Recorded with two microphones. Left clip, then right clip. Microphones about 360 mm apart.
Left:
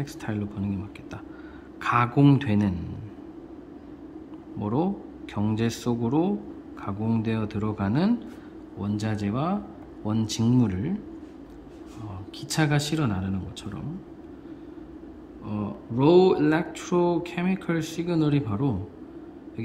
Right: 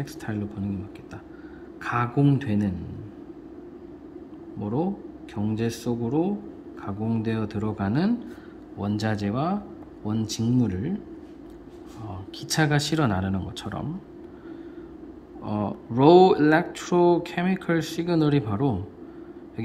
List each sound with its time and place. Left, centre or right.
0.0 s speech: centre
1.8 s speech: centre
4.6 s speech: centre
12.4 s speech: centre
15.4 s speech: centre